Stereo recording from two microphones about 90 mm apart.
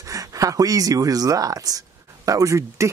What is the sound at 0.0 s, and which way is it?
Speech, 40° right (ahead or behind).